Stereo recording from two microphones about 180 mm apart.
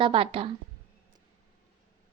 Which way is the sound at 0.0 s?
30° right (ahead or behind).